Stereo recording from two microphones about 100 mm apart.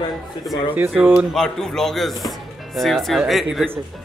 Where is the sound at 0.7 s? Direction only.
20° right (ahead or behind).